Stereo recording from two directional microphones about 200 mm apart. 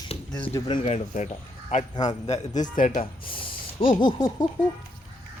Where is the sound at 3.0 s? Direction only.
25° left (ahead or behind).